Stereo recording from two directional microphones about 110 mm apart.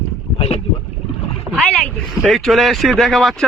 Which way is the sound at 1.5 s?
40° right (ahead or behind).